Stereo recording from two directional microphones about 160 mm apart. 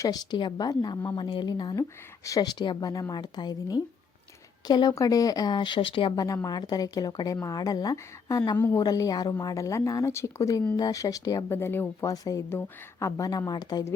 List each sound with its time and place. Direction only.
0.0 s speech: 25° left (ahead or behind)